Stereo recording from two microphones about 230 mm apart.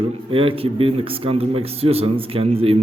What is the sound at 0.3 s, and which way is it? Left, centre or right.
Speech, right.